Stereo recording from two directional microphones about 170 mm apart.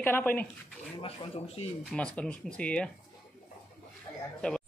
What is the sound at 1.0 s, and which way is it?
Speech, 35° left (ahead or behind).